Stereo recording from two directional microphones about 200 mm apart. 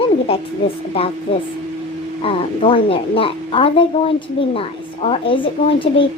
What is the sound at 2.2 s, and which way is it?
A woman's voice, 25° left (ahead or behind).